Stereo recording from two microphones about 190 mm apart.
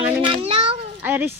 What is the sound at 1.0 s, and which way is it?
Speech, 10° right (ahead or behind).